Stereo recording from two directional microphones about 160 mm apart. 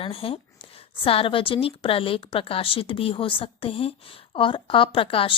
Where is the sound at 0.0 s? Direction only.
35° left (ahead or behind).